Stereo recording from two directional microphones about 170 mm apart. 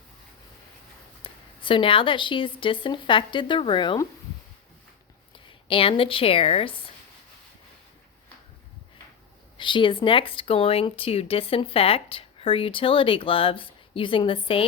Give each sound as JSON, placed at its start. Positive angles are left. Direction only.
{"t": 1.2, "sound": "speech", "side_deg": 30}
{"t": 5.6, "sound": "speech", "side_deg": 30}
{"t": 9.6, "sound": "speech", "side_deg": 30}